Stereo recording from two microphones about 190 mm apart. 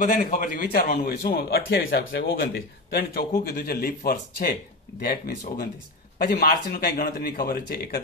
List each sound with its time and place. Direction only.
0.0 s a man's voice: 45° left (ahead or behind)
2.0 s speech: 70° left (ahead or behind)
2.9 s a man's voice: 50° left (ahead or behind)